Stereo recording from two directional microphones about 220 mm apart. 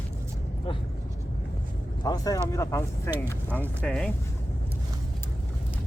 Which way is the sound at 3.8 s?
Centre (ahead or behind).